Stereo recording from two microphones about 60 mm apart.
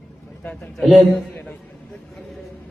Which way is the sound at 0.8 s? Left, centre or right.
Centre.